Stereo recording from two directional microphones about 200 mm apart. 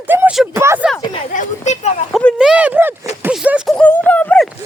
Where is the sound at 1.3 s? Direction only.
35° left (ahead or behind).